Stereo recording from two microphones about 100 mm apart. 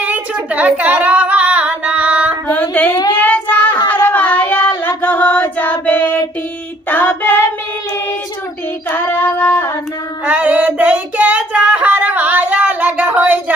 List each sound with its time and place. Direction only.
0.0 s female singing: 15° right (ahead or behind)
2.5 s a sound: 15° left (ahead or behind)
3.2 s child singing: 15° left (ahead or behind)
3.8 s a sound: 15° left (ahead or behind)
5.0 s music: 15° left (ahead or behind)
6.8 s child singing: 20° left (ahead or behind)
8.9 s female singing: 20° left (ahead or behind)
10.2 s child singing: 15° right (ahead or behind)